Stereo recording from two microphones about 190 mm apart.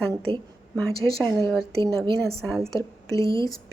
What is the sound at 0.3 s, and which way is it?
Speech, 30° right (ahead or behind).